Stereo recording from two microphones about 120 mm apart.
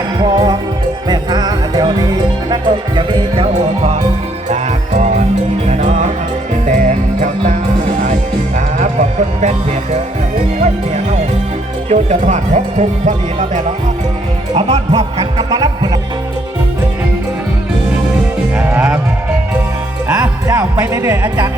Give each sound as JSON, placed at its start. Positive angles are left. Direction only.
{"t": 0.2, "sound": "music", "side_deg": -35}
{"t": 4.4, "sound": "music", "side_deg": -75}
{"t": 8.5, "sound": "music", "side_deg": -80}
{"t": 11.9, "sound": "speech", "side_deg": -70}
{"t": 14.5, "sound": "speech", "side_deg": -55}
{"t": 15.2, "sound": "music", "side_deg": -35}
{"t": 18.5, "sound": "music", "side_deg": -15}
{"t": 20.1, "sound": "music", "side_deg": -20}
{"t": 20.9, "sound": "speech", "side_deg": -25}